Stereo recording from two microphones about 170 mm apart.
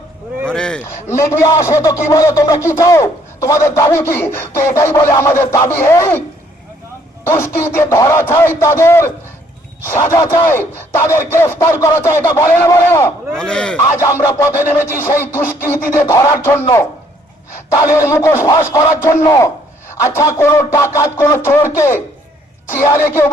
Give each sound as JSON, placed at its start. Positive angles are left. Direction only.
{"t": 0.4, "sound": "a sound", "side_deg": 5}
{"t": 1.6, "sound": "speech", "side_deg": 20}
{"t": 7.3, "sound": "speech", "side_deg": 15}
{"t": 13.3, "sound": "speech", "side_deg": 5}
{"t": 13.9, "sound": "speech", "side_deg": 15}
{"t": 17.8, "sound": "speech", "side_deg": 15}
{"t": 18.4, "sound": "a sound", "side_deg": 20}
{"t": 20.0, "sound": "speech", "side_deg": 20}